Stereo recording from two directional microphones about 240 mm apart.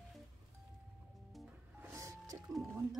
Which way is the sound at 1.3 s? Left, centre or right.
Centre.